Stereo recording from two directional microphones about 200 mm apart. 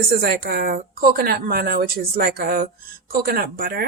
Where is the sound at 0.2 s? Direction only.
50° right (ahead or behind).